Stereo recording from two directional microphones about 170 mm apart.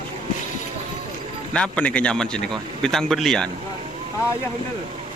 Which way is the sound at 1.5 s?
5° left (ahead or behind).